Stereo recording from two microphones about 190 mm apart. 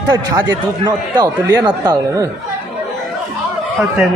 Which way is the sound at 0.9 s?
20° right (ahead or behind).